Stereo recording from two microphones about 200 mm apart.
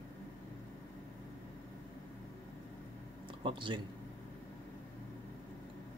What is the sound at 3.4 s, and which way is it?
Speech, 25° right (ahead or behind).